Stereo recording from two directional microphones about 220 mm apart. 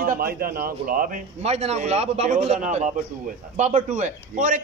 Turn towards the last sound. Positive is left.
turn(degrees=-35)  # may be behind; listen again after turning